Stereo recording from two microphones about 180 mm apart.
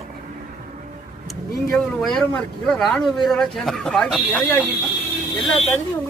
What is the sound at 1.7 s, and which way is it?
Speech, centre (ahead or behind).